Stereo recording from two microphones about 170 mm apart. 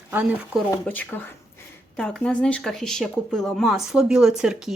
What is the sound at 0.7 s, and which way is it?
A woman's voice, 10° left (ahead or behind).